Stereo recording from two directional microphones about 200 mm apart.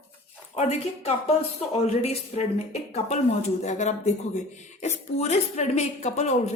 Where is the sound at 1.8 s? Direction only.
30° left (ahead or behind).